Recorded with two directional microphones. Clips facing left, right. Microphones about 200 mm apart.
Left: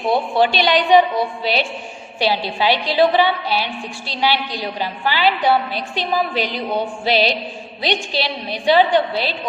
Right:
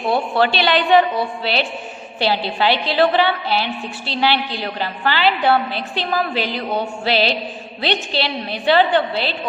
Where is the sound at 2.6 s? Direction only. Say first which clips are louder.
Left 1 dB; 10° left (ahead or behind).